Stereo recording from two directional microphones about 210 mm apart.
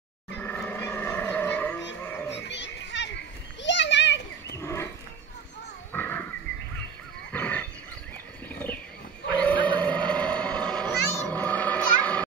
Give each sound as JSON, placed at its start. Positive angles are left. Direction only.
{"t": 0.4, "sound": "roaring cats", "side_deg": 5}
{"t": 2.3, "sound": "children playing", "side_deg": 55}
{"t": 4.6, "sound": "wild animals", "side_deg": 10}
{"t": 5.9, "sound": "wild animals", "side_deg": 10}
{"t": 7.3, "sound": "wild animals", "side_deg": 10}
{"t": 9.7, "sound": "a sound", "side_deg": 5}
{"t": 11.3, "sound": "children playing", "side_deg": 5}